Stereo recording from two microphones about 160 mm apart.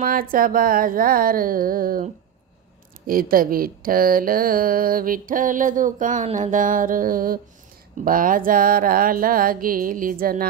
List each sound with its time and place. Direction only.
0.0 s speech: 60° right (ahead or behind)
3.1 s speech: 65° right (ahead or behind)